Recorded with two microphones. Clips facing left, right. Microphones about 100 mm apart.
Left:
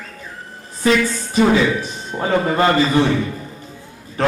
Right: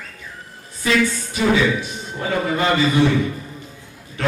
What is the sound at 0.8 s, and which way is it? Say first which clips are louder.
A man's voice: left 2 dB; 40° left (ahead or behind).